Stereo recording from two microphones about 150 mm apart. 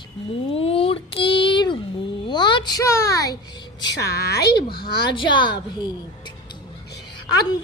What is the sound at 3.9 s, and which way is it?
Speech, 90° left.